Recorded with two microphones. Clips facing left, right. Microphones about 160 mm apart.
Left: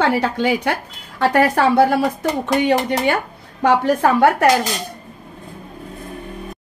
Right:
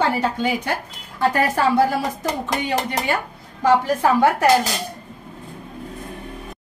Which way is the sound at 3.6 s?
60° left (ahead or behind).